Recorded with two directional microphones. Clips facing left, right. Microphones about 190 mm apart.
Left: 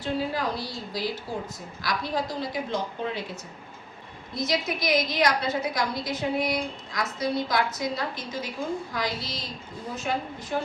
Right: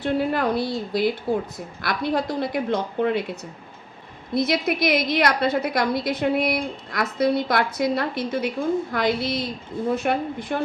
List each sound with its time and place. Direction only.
0.0 s a woman's voice: 60° right (ahead or behind)
4.4 s a woman's voice: 60° right (ahead or behind)